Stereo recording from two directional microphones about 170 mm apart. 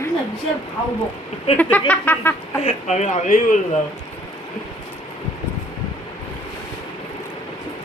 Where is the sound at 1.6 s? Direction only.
10° left (ahead or behind).